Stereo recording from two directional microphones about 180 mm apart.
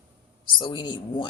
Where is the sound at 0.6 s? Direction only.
25° left (ahead or behind).